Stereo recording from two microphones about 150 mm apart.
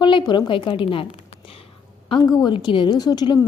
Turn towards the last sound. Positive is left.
turn(degrees=30)  # may be behind; listen again after turning